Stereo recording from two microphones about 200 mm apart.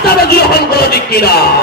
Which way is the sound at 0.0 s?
50° left (ahead or behind).